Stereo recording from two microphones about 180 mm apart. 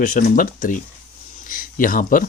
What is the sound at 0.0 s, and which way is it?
Speech, 45° left (ahead or behind).